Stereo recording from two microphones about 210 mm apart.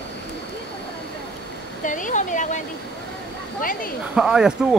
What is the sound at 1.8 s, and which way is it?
Speech, 40° left (ahead or behind).